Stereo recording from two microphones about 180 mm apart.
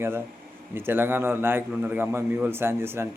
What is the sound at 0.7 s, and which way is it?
A man's voice, 10° right (ahead or behind).